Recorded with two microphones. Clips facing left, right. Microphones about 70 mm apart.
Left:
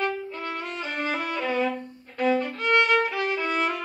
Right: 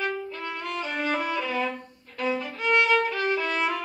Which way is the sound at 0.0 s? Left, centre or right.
Centre.